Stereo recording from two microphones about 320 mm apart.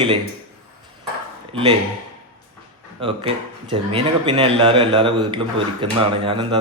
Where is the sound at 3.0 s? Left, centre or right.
Centre.